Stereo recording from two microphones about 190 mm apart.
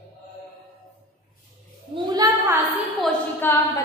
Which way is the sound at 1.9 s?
25° right (ahead or behind).